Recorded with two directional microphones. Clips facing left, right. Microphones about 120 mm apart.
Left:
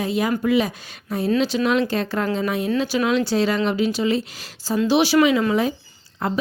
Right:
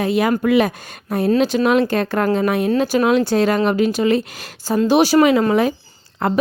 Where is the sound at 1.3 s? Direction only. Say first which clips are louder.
Right 4 dB; 50° right (ahead or behind).